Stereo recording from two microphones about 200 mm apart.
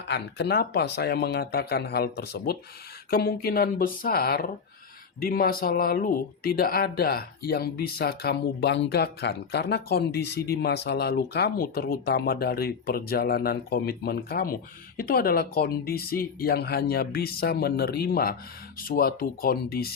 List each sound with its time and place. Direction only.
0.1 s speech: 55° left (ahead or behind)